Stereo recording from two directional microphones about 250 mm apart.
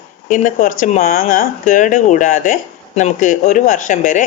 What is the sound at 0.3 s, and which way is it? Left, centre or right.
A woman's voice, left.